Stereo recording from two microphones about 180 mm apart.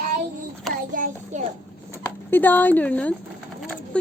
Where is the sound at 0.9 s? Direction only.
50° right (ahead or behind).